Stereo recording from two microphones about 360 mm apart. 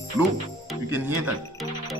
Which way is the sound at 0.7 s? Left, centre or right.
Centre.